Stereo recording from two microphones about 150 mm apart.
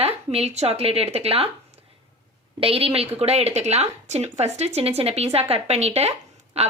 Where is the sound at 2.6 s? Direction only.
40° right (ahead or behind).